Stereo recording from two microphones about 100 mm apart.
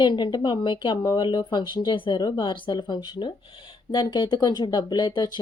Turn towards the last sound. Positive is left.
turn(degrees=45)  # may be behind; listen again after turning